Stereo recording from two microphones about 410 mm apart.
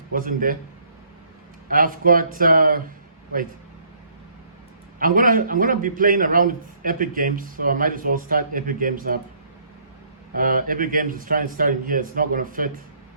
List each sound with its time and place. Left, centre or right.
0.1 s a man's voice: centre
1.6 s a man's voice: right
4.9 s a man's voice: centre
10.3 s a man's voice: right